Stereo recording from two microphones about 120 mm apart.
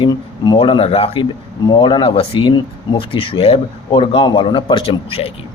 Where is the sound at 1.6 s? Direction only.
40° left (ahead or behind).